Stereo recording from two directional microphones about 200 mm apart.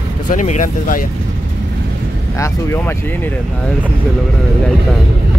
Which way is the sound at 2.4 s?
10° left (ahead or behind).